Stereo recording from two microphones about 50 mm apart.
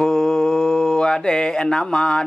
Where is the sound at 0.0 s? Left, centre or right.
Centre.